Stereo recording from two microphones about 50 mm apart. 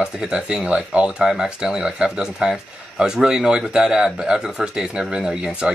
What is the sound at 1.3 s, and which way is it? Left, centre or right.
Speech, centre.